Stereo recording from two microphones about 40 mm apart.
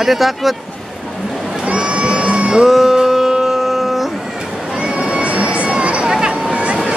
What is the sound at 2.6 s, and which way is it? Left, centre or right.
Music, centre.